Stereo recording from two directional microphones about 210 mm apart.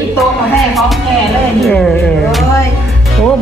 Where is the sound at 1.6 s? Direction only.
Centre (ahead or behind).